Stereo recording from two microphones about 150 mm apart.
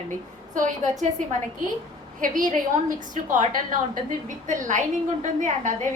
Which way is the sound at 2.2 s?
60° right (ahead or behind).